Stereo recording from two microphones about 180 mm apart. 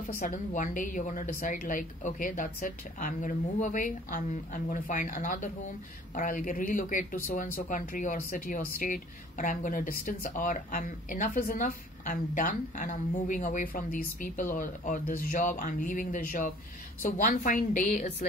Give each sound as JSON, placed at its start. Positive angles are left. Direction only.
{"t": 0.1, "sound": "speech", "side_deg": 40}